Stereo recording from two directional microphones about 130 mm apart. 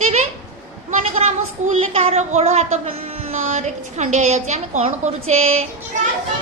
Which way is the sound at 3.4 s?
65° right (ahead or behind).